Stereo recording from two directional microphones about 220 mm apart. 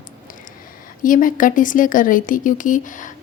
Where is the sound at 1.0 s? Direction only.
40° left (ahead or behind).